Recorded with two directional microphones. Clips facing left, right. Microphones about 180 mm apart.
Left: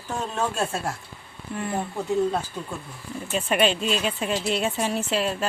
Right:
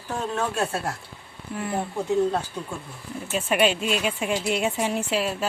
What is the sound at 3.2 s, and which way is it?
Speech, 5° right (ahead or behind).